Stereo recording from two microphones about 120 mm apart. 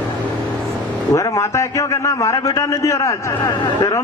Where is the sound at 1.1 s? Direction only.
25° left (ahead or behind).